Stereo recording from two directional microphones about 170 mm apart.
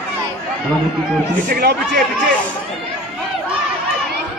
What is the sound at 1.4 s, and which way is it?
Speech, 55° right (ahead or behind).